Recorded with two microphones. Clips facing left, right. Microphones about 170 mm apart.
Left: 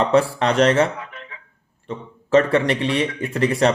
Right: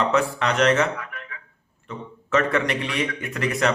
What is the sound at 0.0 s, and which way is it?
Speech, 30° left (ahead or behind).